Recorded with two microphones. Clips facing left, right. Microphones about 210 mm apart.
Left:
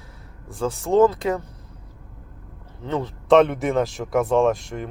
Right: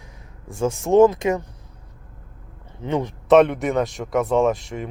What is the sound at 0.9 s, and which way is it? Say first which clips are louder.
Speech: right 3 dB; 15° right (ahead or behind).